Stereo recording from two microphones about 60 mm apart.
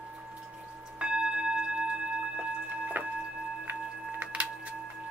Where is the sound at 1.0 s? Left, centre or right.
Centre.